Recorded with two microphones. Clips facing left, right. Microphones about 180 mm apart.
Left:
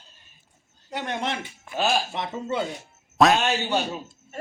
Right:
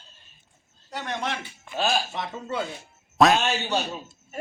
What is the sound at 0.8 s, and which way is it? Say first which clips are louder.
Speech: left 2 dB; 25° left (ahead or behind).